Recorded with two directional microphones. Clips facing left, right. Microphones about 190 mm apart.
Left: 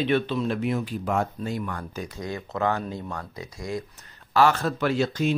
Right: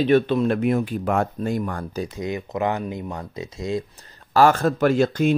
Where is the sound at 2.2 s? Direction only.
20° right (ahead or behind).